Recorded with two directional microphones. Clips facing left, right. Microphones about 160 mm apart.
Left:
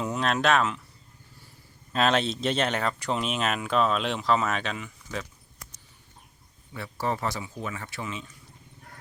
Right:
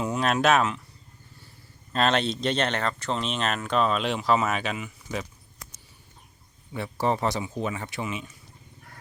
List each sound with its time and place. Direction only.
0.0 s speech: centre (ahead or behind)
1.9 s speech: 5° left (ahead or behind)
6.7 s speech: 20° right (ahead or behind)